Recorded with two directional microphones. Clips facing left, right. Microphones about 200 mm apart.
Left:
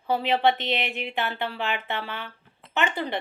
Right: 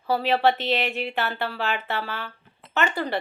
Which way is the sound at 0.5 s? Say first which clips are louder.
Right 3 dB; 40° right (ahead or behind).